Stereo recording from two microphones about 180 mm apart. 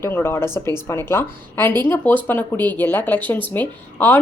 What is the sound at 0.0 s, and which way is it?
Speech, 15° left (ahead or behind).